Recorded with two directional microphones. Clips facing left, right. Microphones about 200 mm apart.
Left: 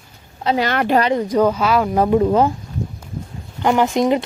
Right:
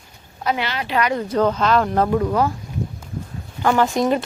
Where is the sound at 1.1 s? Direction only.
15° left (ahead or behind).